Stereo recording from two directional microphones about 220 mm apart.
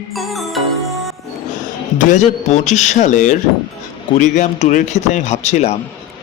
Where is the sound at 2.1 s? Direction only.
30° left (ahead or behind).